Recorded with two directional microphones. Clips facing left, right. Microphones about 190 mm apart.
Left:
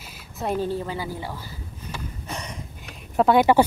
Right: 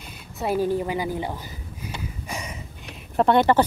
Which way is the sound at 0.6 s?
15° right (ahead or behind).